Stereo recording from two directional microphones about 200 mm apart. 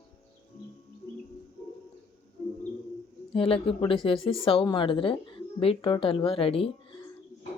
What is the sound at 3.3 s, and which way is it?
Speech, 25° left (ahead or behind).